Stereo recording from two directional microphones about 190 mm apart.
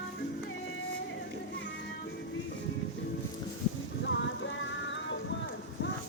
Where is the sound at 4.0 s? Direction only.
70° left (ahead or behind).